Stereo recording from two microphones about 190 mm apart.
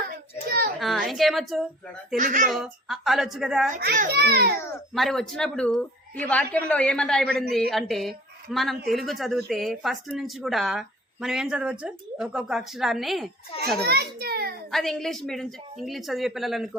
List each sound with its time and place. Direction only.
0.8 s speech: centre (ahead or behind)
2.1 s speech: 40° right (ahead or behind)
2.5 s speech: centre (ahead or behind)
3.7 s a child's voice: 50° right (ahead or behind)
4.9 s speech: centre (ahead or behind)
13.8 s a child's voice: 55° right (ahead or behind)
14.7 s speech: centre (ahead or behind)